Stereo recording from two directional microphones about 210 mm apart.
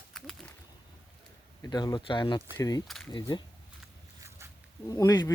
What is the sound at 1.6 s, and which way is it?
Speech, 20° left (ahead or behind).